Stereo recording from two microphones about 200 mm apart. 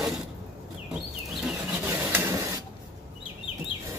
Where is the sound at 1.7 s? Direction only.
10° right (ahead or behind).